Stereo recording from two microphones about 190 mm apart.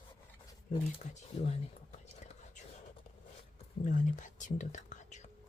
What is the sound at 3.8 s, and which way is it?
Speech, 40° left (ahead or behind).